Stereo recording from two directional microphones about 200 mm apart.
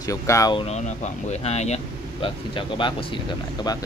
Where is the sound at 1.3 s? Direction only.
35° left (ahead or behind).